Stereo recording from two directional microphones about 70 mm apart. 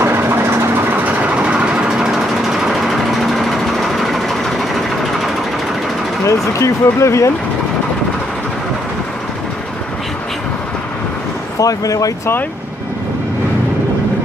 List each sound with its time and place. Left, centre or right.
0.0 s vehicle: right
1.2 s vehicle: centre
6.2 s speech: left
11.6 s speech: left